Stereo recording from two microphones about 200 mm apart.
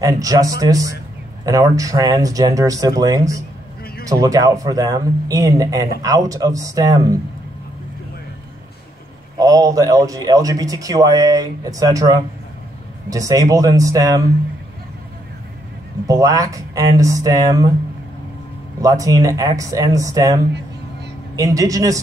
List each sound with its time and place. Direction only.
0.0 s speech: 15° right (ahead or behind)
9.4 s speech: 15° right (ahead or behind)
16.1 s speech: 20° right (ahead or behind)
18.8 s speech: 15° right (ahead or behind)
21.4 s speech: 15° right (ahead or behind)